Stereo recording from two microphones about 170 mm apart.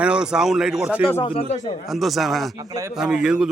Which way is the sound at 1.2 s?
35° left (ahead or behind).